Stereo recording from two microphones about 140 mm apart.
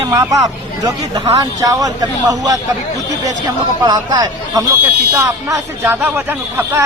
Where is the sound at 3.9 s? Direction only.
25° right (ahead or behind).